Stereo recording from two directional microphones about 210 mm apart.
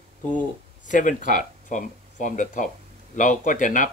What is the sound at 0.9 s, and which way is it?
Speech, 40° left (ahead or behind).